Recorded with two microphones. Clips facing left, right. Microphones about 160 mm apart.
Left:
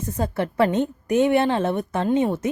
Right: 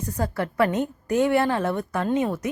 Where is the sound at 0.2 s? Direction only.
25° left (ahead or behind).